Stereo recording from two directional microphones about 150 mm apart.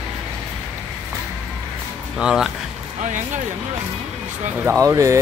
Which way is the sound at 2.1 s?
5° right (ahead or behind).